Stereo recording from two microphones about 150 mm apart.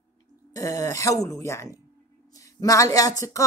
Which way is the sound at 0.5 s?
25° left (ahead or behind).